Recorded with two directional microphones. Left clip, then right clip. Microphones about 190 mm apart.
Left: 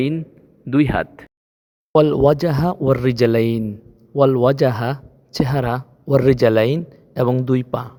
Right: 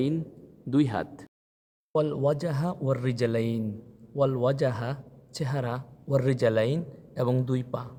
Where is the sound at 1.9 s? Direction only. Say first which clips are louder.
Left 12 dB; 45° left (ahead or behind).